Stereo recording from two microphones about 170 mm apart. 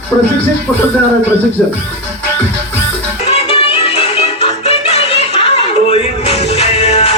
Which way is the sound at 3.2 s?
35° left (ahead or behind).